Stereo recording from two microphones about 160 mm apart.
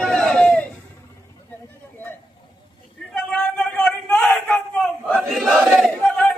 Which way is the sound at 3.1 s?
5° left (ahead or behind).